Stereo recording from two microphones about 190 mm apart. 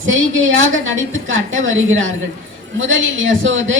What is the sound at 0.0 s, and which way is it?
A woman's voice, 90° right.